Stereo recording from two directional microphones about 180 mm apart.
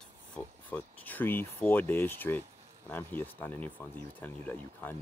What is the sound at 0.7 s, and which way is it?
Speech, 10° left (ahead or behind).